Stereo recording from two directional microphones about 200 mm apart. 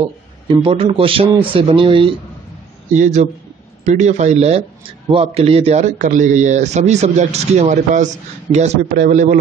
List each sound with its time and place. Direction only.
0.0 s a man's voice: 25° right (ahead or behind)
2.9 s a man's voice: 35° right (ahead or behind)